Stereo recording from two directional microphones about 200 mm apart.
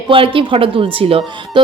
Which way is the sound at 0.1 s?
25° right (ahead or behind).